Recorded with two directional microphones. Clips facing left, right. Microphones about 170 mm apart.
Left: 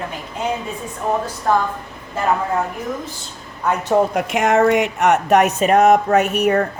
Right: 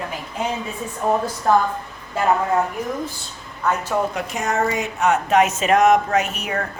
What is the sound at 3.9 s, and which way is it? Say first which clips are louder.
Speech: left 8 dB; 35° left (ahead or behind).